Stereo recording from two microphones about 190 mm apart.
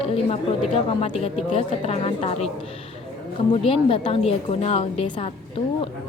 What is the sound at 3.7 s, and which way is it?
A woman's voice, 30° left (ahead or behind).